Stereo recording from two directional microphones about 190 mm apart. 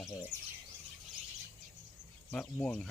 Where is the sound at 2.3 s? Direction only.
5° left (ahead or behind).